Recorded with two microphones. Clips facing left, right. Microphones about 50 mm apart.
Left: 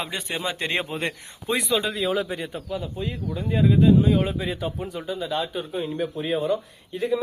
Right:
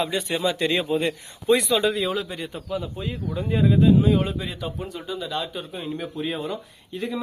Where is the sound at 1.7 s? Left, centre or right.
Centre.